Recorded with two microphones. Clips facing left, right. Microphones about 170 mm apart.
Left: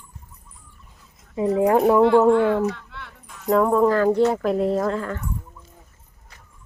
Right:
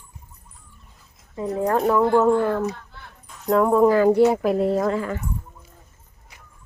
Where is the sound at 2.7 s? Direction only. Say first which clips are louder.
Left 3 dB; 75° left (ahead or behind).